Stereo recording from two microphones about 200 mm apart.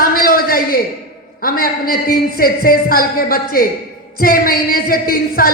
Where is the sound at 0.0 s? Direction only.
45° left (ahead or behind).